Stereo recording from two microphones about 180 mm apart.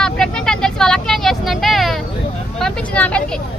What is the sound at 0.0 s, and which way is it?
Vehicle, 5° left (ahead or behind).